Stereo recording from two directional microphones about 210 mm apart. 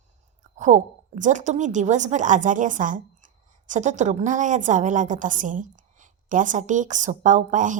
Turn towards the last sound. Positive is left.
turn(degrees=-35)  # may be behind; listen again after turning